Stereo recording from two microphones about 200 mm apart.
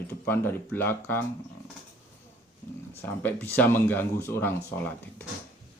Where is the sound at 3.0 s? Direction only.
10° left (ahead or behind).